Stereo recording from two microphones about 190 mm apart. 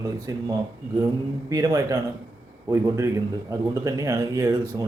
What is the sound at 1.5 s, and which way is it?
Speech, 15° right (ahead or behind).